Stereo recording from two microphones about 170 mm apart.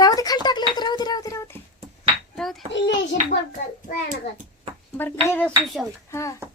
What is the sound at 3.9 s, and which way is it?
Speech, 55° left (ahead or behind).